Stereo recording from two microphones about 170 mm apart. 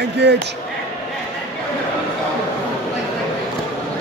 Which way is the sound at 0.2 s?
90° right.